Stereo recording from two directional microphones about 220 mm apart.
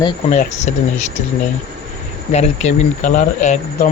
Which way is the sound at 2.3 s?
30° left (ahead or behind).